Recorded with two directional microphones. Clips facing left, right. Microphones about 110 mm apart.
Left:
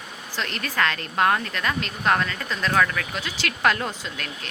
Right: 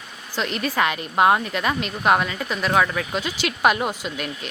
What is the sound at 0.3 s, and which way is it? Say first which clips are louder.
Speech: right 4 dB; 15° right (ahead or behind).